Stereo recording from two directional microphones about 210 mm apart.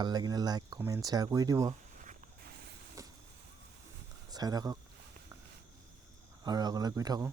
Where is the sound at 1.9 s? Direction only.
40° right (ahead or behind).